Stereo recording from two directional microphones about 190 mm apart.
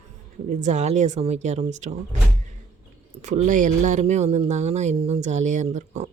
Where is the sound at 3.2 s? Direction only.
40° right (ahead or behind).